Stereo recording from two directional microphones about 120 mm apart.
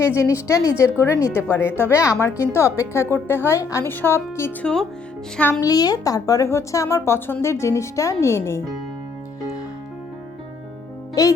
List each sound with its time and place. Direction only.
0.0 s speech: 25° left (ahead or behind)
4.6 s speech: 5° left (ahead or behind)
5.5 s speech: 30° left (ahead or behind)
11.1 s a child's voice: 25° left (ahead or behind)